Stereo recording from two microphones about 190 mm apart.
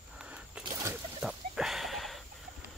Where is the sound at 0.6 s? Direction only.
5° right (ahead or behind).